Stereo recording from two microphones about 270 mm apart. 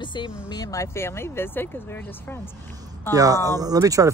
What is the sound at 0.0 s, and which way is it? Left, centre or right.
Speech, centre.